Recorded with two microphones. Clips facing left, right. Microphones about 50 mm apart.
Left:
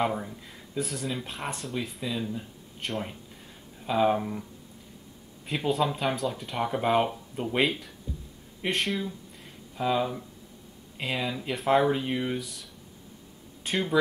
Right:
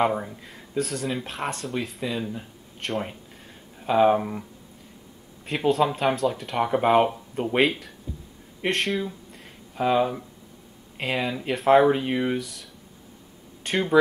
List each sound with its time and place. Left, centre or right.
0.0 s speech: centre
0.7 s speech: centre
2.1 s speech: centre
3.8 s speech: centre
5.9 s speech: centre
6.1 s speech: centre
6.6 s speech: centre
9.8 s speech: centre
12.4 s speech: centre
13.7 s speech: centre